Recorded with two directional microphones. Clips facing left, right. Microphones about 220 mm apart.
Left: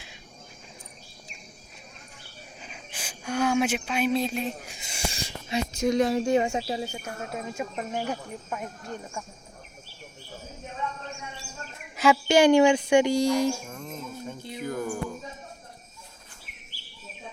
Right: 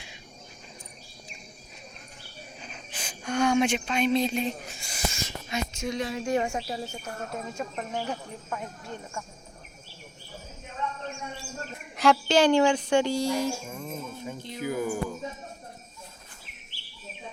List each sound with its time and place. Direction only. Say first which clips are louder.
2.6 s speech: even; 5° left (ahead or behind)
4.7 s a sound: right 1 dB; 20° left (ahead or behind); by 6.2 s 45° left (ahead or behind)
6.2 s speech: left 3 dB; 20° left (ahead or behind)
12.0 s speech: left 1 dB; centre (ahead or behind)
12.3 s speech: left 5 dB; 15° left (ahead or behind)
13.7 s music: right 1 dB; 5° right (ahead or behind)
14.6 s a sound: right 2 dB; 10° right (ahead or behind)